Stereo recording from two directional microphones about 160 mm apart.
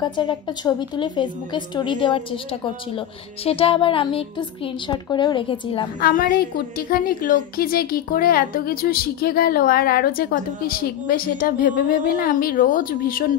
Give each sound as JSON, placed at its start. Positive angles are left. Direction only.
{"t": 0.0, "sound": "a woman's voice", "side_deg": 30}
{"t": 3.4, "sound": "a woman's voice", "side_deg": 35}
{"t": 5.9, "sound": "a woman's voice", "side_deg": 60}